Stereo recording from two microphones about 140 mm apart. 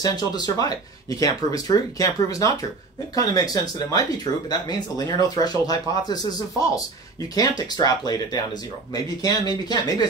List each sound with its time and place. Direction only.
0.0 s speech: 30° left (ahead or behind)
7.3 s speech: 30° left (ahead or behind)